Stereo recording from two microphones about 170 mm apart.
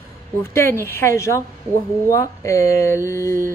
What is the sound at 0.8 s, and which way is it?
A woman's voice, 15° left (ahead or behind).